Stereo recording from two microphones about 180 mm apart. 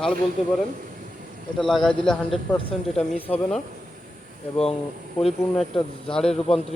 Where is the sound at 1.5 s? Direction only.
Centre (ahead or behind).